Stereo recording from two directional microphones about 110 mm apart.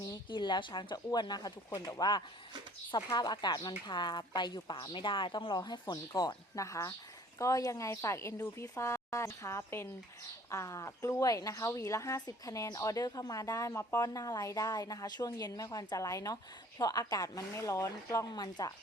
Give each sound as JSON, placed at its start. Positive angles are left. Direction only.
{"t": 0.1, "sound": "a woman's voice", "side_deg": 45}